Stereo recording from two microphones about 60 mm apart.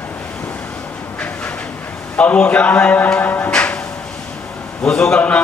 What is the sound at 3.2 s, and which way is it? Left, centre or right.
Music, left.